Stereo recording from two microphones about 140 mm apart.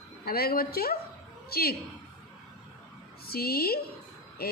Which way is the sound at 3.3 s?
90° left.